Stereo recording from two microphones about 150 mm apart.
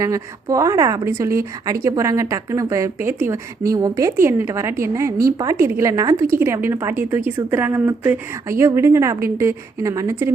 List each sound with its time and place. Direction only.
0.0 s a woman's voice: 20° right (ahead or behind)